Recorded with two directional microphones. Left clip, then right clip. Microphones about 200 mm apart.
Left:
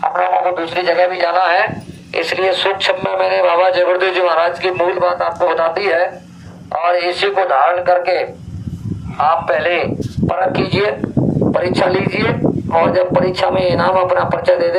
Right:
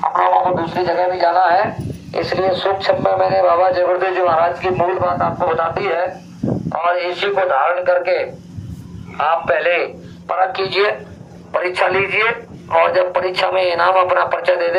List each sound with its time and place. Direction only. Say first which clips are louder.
0.4 s a man's voice: left 2 dB; 25° left (ahead or behind); by 8.3 s 45° left (ahead or behind)
9.1 s a man's voice: left 2 dB; 30° left (ahead or behind)
10.2 s speech: left 1 dB; 15° left (ahead or behind)